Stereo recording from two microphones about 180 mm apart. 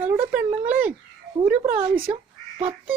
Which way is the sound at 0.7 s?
10° right (ahead or behind).